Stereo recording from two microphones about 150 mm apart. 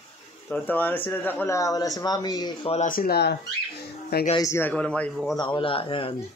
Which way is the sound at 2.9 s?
80° left.